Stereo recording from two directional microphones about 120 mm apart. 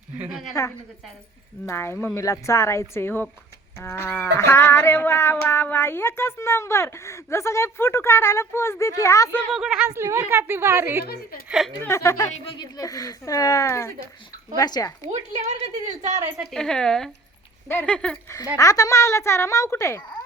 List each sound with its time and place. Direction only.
0.6 s livestock: 25° left (ahead or behind)
9.5 s a woman's voice: 5° right (ahead or behind)
10.0 s a woman's voice: 20° right (ahead or behind)
11.4 s a woman's voice: centre (ahead or behind)
11.8 s livestock: 25° left (ahead or behind)
14.5 s speech: 35° left (ahead or behind)
15.1 s a woman's voice: 65° right (ahead or behind)
16.4 s a woman's voice: 5° left (ahead or behind)
18.5 s livestock: 30° left (ahead or behind)